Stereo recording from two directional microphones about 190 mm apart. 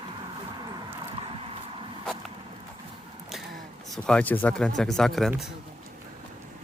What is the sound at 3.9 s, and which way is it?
Speech, 5° left (ahead or behind).